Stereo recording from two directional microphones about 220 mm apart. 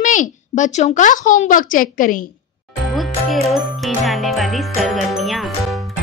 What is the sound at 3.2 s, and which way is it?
Music, centre (ahead or behind).